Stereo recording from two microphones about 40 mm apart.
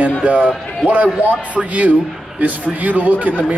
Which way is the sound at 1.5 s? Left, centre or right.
Right.